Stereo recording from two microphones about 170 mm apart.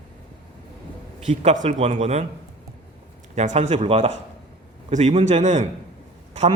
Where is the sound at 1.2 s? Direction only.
45° right (ahead or behind).